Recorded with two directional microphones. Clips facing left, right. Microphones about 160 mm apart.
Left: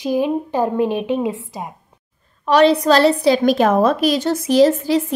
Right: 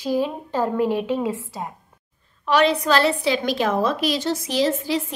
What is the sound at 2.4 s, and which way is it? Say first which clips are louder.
A woman's voice: left 6 dB; 40° left (ahead or behind).